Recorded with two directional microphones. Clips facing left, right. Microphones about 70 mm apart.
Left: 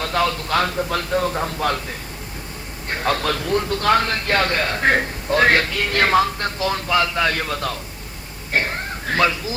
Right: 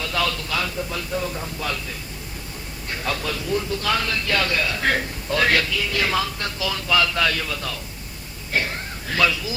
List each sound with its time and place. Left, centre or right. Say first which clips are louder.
0.0 s a man's voice: left 4 dB; left
7.3 s a man's voice: left 4 dB; left